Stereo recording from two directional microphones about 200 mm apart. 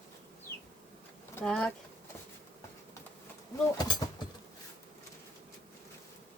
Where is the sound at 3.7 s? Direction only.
20° left (ahead or behind).